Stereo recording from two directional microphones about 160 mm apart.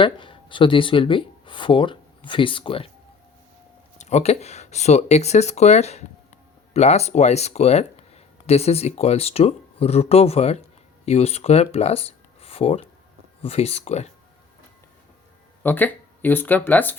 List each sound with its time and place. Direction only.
0.0 s speech: 30° left (ahead or behind)
3.9 s speech: 45° left (ahead or behind)
15.6 s speech: 10° left (ahead or behind)